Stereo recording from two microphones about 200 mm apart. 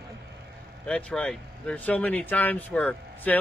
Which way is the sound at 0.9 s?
5° left (ahead or behind).